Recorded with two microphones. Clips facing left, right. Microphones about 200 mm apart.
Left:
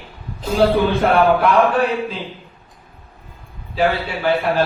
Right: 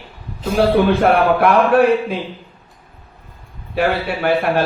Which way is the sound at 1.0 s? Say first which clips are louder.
Right 1 dB; 65° right (ahead or behind).